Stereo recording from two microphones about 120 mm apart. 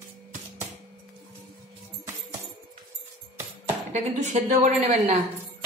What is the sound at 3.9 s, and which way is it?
A woman's voice, 85° right.